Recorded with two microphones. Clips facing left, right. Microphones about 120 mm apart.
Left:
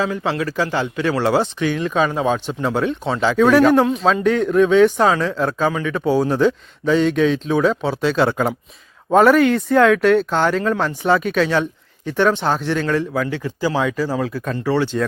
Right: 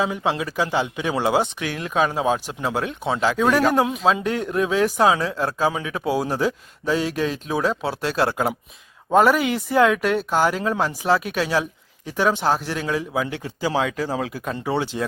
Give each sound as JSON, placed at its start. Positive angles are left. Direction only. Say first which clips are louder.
{"t": 0.0, "sound": "speech", "louder": "left 2 dB", "side_deg": -15}